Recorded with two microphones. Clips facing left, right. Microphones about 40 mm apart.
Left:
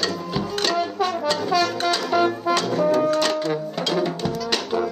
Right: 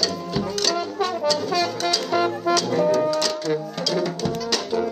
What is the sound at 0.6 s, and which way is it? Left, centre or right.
Brass instrument, left.